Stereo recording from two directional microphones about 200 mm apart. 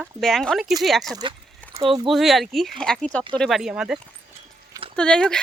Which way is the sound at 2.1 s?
Centre (ahead or behind).